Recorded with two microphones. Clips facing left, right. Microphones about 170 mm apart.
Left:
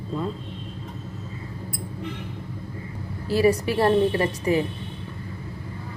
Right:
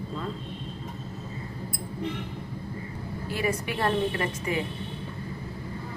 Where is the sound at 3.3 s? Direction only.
35° left (ahead or behind).